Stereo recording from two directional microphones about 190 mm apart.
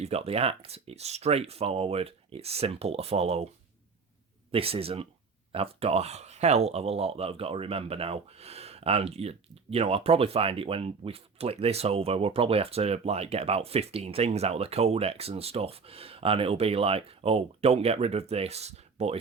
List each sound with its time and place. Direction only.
0.0 s speech: 30° right (ahead or behind)
4.5 s speech: 30° right (ahead or behind)